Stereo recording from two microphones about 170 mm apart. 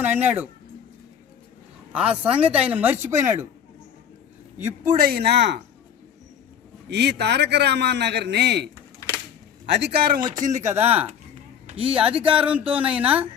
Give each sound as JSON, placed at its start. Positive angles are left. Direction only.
{"t": 0.0, "sound": "speech", "side_deg": -10}
{"t": 1.9, "sound": "speech", "side_deg": -5}
{"t": 4.5, "sound": "speech", "side_deg": -15}
{"t": 5.0, "sound": "a man's voice", "side_deg": -75}
{"t": 6.9, "sound": "a man's voice", "side_deg": -80}
{"t": 9.0, "sound": "a sound", "side_deg": 15}
{"t": 9.6, "sound": "a man's voice", "side_deg": -90}
{"t": 10.2, "sound": "speech", "side_deg": -25}
{"t": 10.6, "sound": "speech", "side_deg": -15}